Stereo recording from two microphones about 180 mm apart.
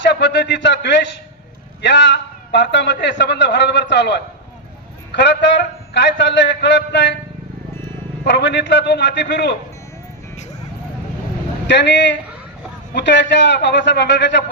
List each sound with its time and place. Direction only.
0.0 s a sound: 75° left (ahead or behind)
1.8 s a man's voice: 80° left
8.2 s a man's voice: 75° left (ahead or behind)
11.7 s a man's voice: 80° left